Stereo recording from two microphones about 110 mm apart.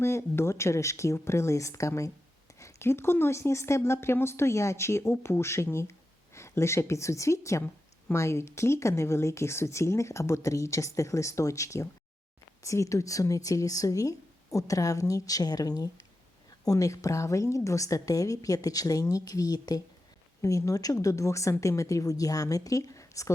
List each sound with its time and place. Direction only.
0.0 s speech: 25° left (ahead or behind)